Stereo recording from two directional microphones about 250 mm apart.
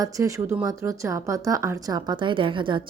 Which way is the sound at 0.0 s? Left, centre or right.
Centre.